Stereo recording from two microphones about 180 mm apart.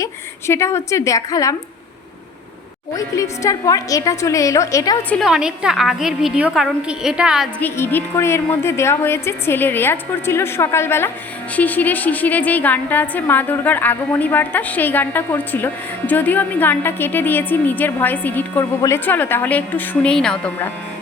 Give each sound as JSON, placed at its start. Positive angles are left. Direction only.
{"t": 0.0, "sound": "a woman's voice", "side_deg": 15}
{"t": 2.9, "sound": "a woman's voice", "side_deg": 20}
{"t": 5.1, "sound": "a woman's voice", "side_deg": 0}
{"t": 7.6, "sound": "a woman's voice", "side_deg": 10}